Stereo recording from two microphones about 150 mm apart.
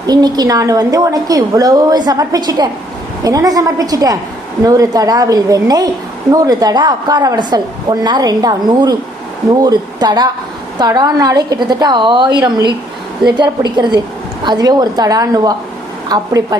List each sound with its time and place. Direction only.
0.1 s a woman's voice: 25° right (ahead or behind)